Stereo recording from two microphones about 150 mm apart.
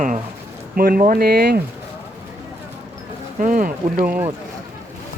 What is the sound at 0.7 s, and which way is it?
Speech, 75° right (ahead or behind).